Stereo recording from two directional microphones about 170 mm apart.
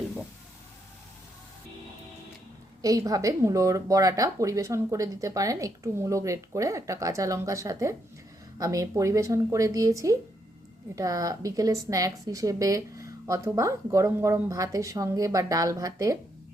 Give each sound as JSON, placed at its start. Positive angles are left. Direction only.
{"t": 2.8, "sound": "a woman's voice", "side_deg": -20}